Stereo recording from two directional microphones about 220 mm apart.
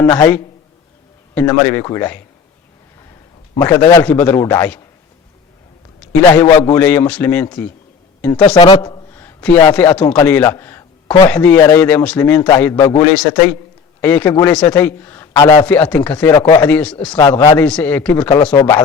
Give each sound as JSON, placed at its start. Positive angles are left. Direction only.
{"t": 0.0, "sound": "a man's voice", "side_deg": 15}
{"t": 3.5, "sound": "a man's voice", "side_deg": 15}
{"t": 6.3, "sound": "a man's voice", "side_deg": 10}
{"t": 8.4, "sound": "a man's voice", "side_deg": 20}
{"t": 9.1, "sound": "a sound", "side_deg": 10}
{"t": 9.7, "sound": "a man's voice", "side_deg": 5}
{"t": 16.1, "sound": "a man's voice", "side_deg": 20}
{"t": 17.1, "sound": "a man's voice", "side_deg": 20}